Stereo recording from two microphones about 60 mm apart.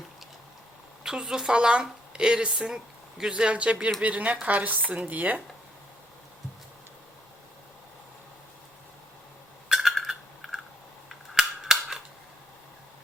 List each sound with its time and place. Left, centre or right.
1.0 s a woman's voice: centre; by 5.4 s right
9.6 s a sound: centre
11.1 s cap gun: centre